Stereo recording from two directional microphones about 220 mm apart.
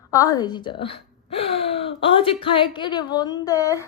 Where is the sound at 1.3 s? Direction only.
25° left (ahead or behind).